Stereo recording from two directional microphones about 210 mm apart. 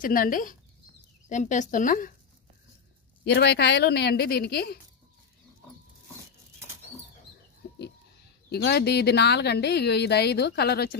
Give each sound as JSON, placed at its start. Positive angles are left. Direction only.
{"t": 0.0, "sound": "speech", "side_deg": 40}
{"t": 3.3, "sound": "speech", "side_deg": 50}
{"t": 8.5, "sound": "speech", "side_deg": 50}